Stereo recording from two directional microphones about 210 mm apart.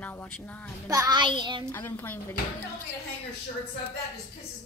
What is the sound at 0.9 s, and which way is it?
Speech, 15° right (ahead or behind).